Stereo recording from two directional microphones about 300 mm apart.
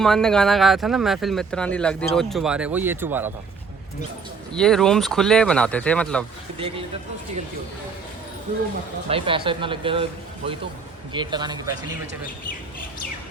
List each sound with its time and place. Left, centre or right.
0.0 s speech: centre
4.5 s speech: centre
9.0 s speech: centre